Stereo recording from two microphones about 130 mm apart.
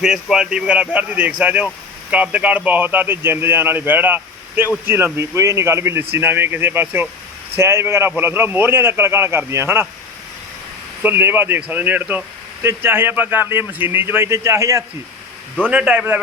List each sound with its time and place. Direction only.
0.0 s a man's voice: 5° right (ahead or behind)
11.0 s a man's voice: 15° right (ahead or behind)
15.7 s a man's voice: 10° right (ahead or behind)